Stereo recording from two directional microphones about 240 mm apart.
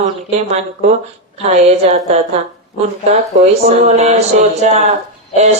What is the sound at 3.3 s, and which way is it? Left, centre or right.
Speech, right.